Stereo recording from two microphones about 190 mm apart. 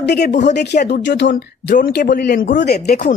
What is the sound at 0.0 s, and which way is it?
Speech, 60° left (ahead or behind).